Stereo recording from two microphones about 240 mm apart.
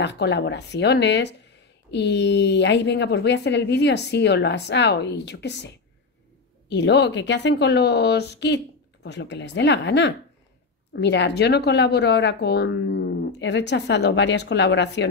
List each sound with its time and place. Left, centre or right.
0.0 s speech: left
6.7 s speech: left